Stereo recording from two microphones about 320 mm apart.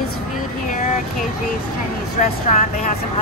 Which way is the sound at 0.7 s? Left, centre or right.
Left.